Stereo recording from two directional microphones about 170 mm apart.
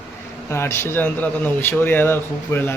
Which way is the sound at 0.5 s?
15° left (ahead or behind).